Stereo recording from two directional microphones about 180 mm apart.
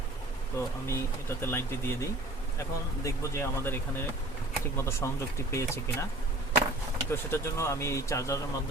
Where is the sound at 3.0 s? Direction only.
15° left (ahead or behind).